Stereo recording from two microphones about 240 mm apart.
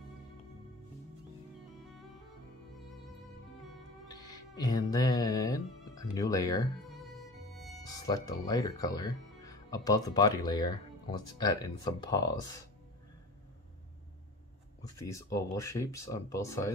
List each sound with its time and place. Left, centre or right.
4.1 s music: centre
6.8 s music: centre
7.8 s speech: centre
14.8 s speech: centre